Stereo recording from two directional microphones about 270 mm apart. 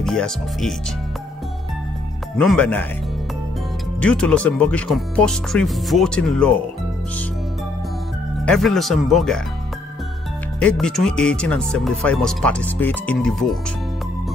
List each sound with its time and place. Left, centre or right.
0.0 s speech: centre
2.3 s speech: centre
4.0 s speech: centre
8.5 s speech: centre
10.6 s speech: centre